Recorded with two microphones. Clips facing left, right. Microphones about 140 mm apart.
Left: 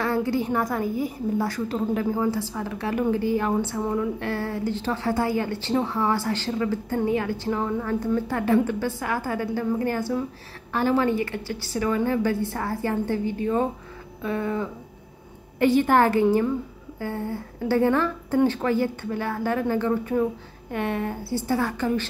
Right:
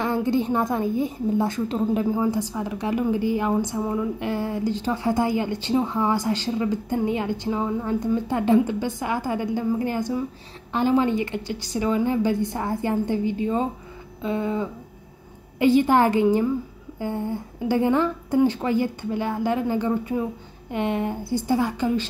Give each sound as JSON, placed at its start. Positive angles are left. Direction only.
{"t": 0.0, "sound": "a woman's voice", "side_deg": -20}